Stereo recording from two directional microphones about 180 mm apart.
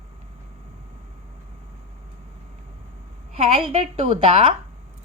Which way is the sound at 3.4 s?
35° right (ahead or behind).